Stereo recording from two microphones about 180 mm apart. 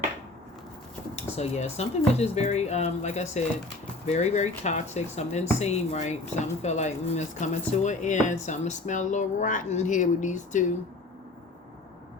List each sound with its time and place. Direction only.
1.1 s speech: 35° left (ahead or behind)